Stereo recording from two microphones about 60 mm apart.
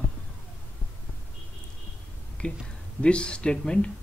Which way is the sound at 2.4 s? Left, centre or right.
Left.